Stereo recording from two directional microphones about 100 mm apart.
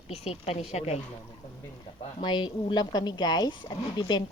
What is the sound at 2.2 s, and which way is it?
A woman's voice, 50° left (ahead or behind).